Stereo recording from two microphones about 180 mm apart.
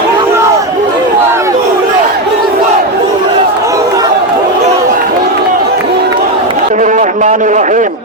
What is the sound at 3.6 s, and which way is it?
Chatter, 20° right (ahead or behind).